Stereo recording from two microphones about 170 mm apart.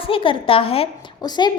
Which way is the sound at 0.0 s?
30° left (ahead or behind).